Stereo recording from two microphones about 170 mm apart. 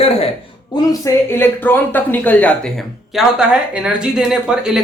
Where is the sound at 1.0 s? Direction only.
15° left (ahead or behind).